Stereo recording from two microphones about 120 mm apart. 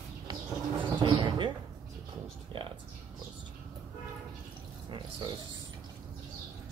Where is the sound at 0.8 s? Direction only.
40° right (ahead or behind).